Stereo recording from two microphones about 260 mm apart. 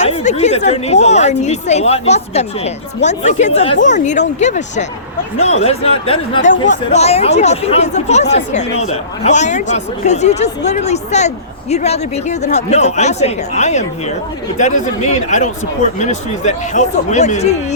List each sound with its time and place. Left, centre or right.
0.0 s speech: left